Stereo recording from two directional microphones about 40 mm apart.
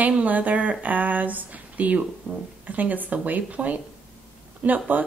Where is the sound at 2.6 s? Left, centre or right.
Right.